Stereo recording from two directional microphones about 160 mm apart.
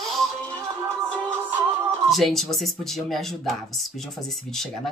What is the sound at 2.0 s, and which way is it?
Speech, centre (ahead or behind).